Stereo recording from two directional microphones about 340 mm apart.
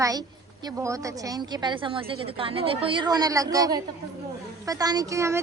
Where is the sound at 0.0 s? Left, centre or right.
Centre.